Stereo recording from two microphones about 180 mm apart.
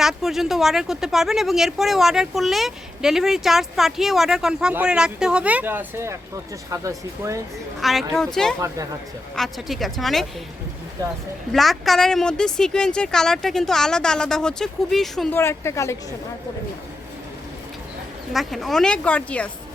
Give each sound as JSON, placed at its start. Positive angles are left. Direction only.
{"t": 0.0, "sound": "speech", "side_deg": 0}
{"t": 7.8, "sound": "speech", "side_deg": 0}
{"t": 11.5, "sound": "speech", "side_deg": 0}
{"t": 15.4, "sound": "a woman's voice", "side_deg": 15}
{"t": 18.3, "sound": "speech", "side_deg": 0}